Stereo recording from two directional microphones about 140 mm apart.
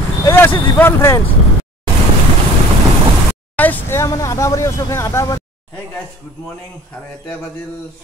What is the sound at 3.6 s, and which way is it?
Speech, 15° left (ahead or behind).